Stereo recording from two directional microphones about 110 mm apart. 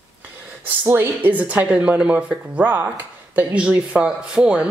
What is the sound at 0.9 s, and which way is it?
Speech, 20° right (ahead or behind).